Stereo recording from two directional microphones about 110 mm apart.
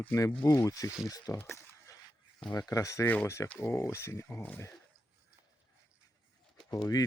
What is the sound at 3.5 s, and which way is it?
Speech, 25° left (ahead or behind).